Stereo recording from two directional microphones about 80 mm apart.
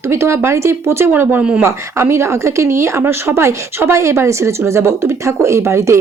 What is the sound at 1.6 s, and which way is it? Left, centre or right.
Speech, right.